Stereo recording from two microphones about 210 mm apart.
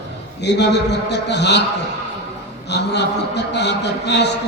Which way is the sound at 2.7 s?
55° left (ahead or behind).